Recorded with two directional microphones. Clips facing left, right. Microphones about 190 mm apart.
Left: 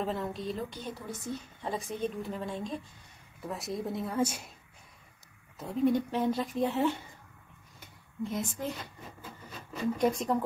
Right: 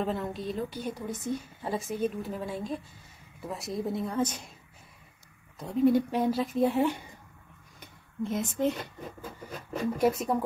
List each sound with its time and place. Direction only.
0.0 s a woman's voice: centre (ahead or behind); by 1.4 s 20° right (ahead or behind)
1.6 s a woman's voice: 5° right (ahead or behind)
5.6 s speech: centre (ahead or behind)
7.8 s a sound: 25° right (ahead or behind)
9.9 s speech: 5° right (ahead or behind)